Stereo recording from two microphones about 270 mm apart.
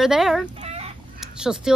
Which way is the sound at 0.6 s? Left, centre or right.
Right.